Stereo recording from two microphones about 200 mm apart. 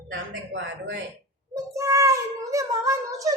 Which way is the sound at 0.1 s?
65° right (ahead or behind).